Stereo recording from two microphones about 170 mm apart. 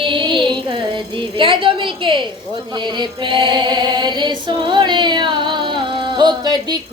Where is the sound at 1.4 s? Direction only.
30° right (ahead or behind).